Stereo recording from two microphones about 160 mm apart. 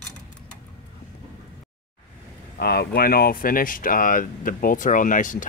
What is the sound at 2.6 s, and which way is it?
Speech, 80° left.